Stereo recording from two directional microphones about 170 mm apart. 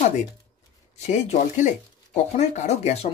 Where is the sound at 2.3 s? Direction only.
40° left (ahead or behind).